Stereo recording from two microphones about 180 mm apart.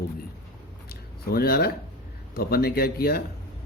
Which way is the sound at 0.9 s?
60° left (ahead or behind).